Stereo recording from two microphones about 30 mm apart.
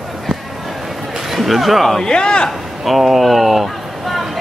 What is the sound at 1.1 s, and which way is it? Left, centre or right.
Speech, centre.